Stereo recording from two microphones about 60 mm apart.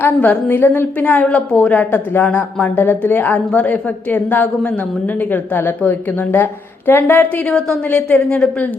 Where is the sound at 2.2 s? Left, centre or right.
Left.